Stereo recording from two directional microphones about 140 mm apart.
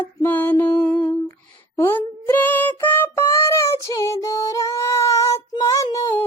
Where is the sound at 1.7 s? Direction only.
15° left (ahead or behind).